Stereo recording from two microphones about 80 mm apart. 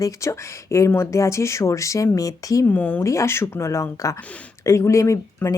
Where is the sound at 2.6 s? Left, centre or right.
Left.